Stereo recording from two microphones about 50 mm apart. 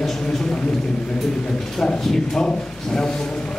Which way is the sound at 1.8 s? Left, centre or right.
Centre.